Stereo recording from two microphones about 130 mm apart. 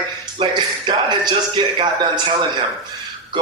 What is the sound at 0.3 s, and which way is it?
Speech, 35° right (ahead or behind).